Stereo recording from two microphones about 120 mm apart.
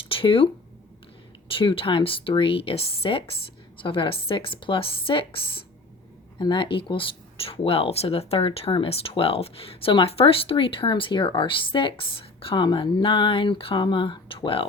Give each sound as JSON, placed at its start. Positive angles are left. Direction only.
{"t": 0.1, "sound": "a sound", "side_deg": 50}
{"t": 1.5, "sound": "speech", "side_deg": 45}
{"t": 6.4, "sound": "speech", "side_deg": 40}